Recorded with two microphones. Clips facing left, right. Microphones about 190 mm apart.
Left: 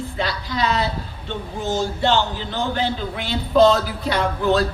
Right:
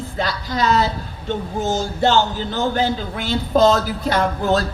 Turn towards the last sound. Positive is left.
turn(degrees=-45)  # may be behind; listen again after turning